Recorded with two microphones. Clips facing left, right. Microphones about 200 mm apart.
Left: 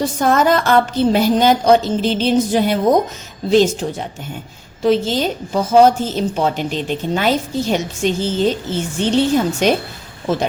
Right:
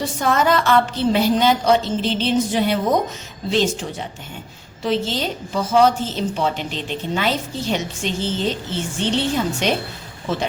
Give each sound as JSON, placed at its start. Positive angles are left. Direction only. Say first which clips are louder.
{"t": 0.0, "sound": "a woman's voice", "louder": "left 4 dB", "side_deg": 45}